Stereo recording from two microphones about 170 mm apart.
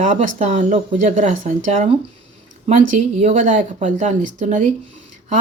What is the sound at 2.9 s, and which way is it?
Speech, 40° right (ahead or behind).